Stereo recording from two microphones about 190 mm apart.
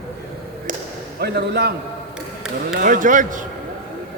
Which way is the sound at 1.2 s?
60° right (ahead or behind).